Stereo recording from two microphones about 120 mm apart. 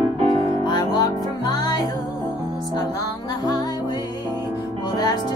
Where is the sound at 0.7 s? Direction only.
35° left (ahead or behind).